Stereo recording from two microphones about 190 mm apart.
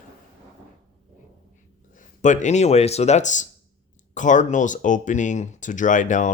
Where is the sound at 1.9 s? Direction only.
40° left (ahead or behind).